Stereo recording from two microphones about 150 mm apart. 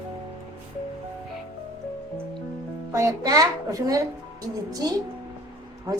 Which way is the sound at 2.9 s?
20° right (ahead or behind).